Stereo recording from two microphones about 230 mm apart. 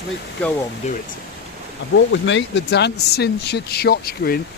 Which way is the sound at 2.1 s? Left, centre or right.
Left.